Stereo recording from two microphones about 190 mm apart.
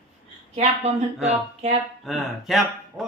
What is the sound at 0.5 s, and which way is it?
Speech, 35° right (ahead or behind).